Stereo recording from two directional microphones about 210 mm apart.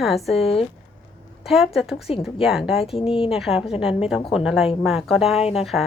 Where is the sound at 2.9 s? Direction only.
25° left (ahead or behind).